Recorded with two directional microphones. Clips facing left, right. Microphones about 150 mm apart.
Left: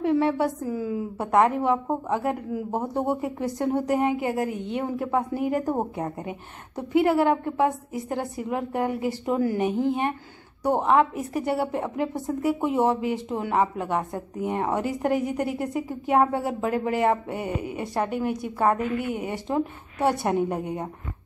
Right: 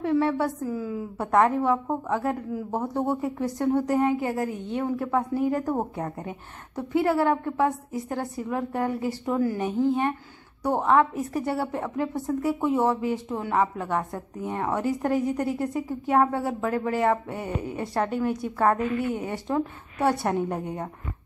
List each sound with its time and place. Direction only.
0.0 s a woman's voice: 25° left (ahead or behind)